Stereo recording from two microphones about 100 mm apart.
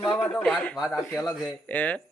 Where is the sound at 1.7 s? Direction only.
15° left (ahead or behind).